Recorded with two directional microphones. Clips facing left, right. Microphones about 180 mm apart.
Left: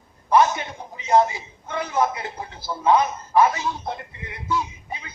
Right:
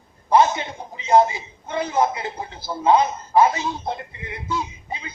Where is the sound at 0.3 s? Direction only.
25° right (ahead or behind).